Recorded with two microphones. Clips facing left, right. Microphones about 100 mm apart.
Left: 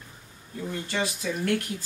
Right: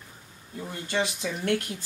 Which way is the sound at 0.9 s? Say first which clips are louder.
Right 2 dB; 20° right (ahead or behind).